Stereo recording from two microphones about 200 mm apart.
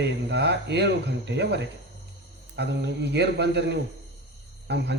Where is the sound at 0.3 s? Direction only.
55° right (ahead or behind).